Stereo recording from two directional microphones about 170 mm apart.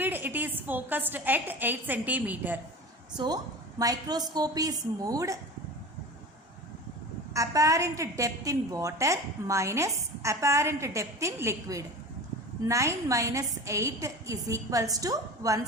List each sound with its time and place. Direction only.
0.0 s a woman's voice: 10° right (ahead or behind)
3.2 s a woman's voice: 25° right (ahead or behind)
7.3 s a woman's voice: 20° right (ahead or behind)